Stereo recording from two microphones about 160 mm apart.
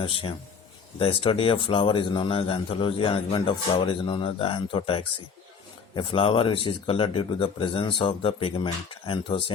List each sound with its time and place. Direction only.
0.0 s a man's voice: 35° left (ahead or behind)